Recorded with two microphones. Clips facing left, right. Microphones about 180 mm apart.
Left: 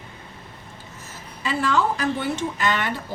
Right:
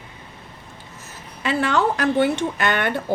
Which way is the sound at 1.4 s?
65° right (ahead or behind).